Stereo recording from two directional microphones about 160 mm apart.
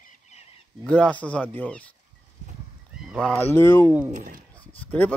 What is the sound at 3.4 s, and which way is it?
Speech, 15° left (ahead or behind).